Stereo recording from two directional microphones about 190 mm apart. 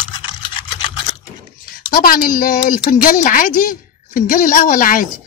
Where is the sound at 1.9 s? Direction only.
50° left (ahead or behind).